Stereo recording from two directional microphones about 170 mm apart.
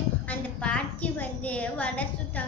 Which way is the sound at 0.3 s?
10° left (ahead or behind).